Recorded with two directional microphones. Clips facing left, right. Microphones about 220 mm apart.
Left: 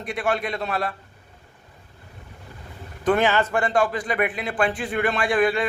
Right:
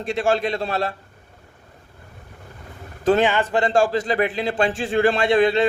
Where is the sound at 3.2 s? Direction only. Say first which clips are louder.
Right 1 dB; 15° right (ahead or behind).